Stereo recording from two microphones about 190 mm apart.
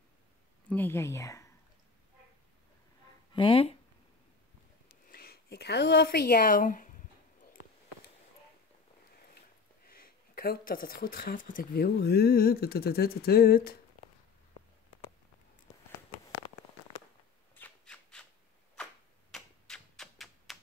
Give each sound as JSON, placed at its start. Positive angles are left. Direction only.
{"t": 0.7, "sound": "speech", "side_deg": 10}
{"t": 3.3, "sound": "speech", "side_deg": 30}
{"t": 5.1, "sound": "speech", "side_deg": 55}
{"t": 9.8, "sound": "speech", "side_deg": 50}
{"t": 17.6, "sound": "a sound", "side_deg": 10}
{"t": 19.3, "sound": "typewriter", "side_deg": 0}